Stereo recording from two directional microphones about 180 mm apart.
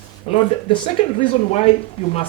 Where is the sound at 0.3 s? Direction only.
35° left (ahead or behind).